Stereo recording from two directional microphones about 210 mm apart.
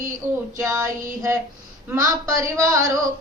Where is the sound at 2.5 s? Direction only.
15° right (ahead or behind).